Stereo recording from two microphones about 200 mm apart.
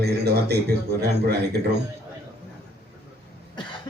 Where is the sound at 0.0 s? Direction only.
55° right (ahead or behind).